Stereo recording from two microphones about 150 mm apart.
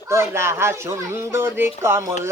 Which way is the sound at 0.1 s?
15° right (ahead or behind).